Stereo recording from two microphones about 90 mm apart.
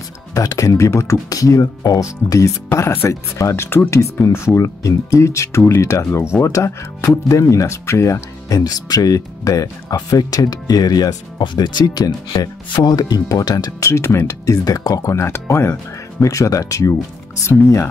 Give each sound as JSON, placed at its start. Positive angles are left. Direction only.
{"t": 0.3, "sound": "speech", "side_deg": 40}
{"t": 12.3, "sound": "speech", "side_deg": 60}
{"t": 13.8, "sound": "speech", "side_deg": 30}